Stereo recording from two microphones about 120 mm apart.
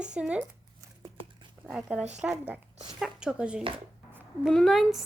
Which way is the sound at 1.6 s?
5° right (ahead or behind).